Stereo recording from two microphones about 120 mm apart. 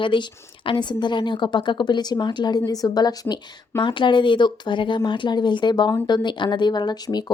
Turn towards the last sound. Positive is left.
turn(degrees=35)  # may be behind; listen again after turning